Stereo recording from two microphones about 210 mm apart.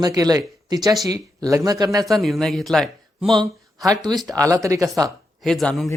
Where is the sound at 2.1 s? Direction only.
Centre (ahead or behind).